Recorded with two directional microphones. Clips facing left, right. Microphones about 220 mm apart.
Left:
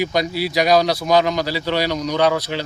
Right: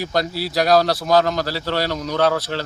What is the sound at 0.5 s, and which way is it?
A man's voice, centre (ahead or behind).